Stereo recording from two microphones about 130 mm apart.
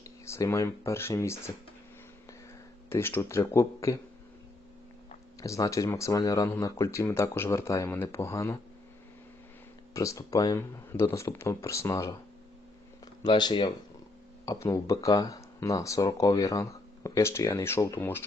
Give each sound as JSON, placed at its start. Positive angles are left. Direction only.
{"t": 0.0, "sound": "speech", "side_deg": 25}
{"t": 2.9, "sound": "speech", "side_deg": 20}
{"t": 5.4, "sound": "speech", "side_deg": 25}
{"t": 9.9, "sound": "speech", "side_deg": 25}
{"t": 13.2, "sound": "speech", "side_deg": 35}